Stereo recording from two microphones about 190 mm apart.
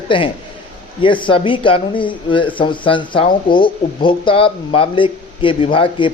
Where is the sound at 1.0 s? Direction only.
25° left (ahead or behind).